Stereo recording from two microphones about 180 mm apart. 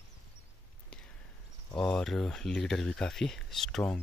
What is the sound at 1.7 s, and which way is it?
Speech, 5° left (ahead or behind).